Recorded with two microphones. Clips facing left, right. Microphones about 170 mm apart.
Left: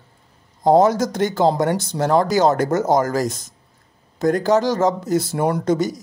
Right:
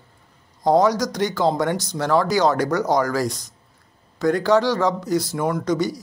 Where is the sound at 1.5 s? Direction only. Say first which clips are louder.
Left 2 dB; 35° left (ahead or behind).